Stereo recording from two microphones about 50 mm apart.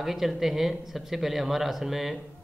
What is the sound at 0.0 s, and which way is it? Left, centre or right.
A man's voice, centre.